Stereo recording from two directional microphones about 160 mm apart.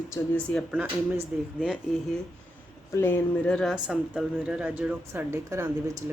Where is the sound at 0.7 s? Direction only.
5° right (ahead or behind).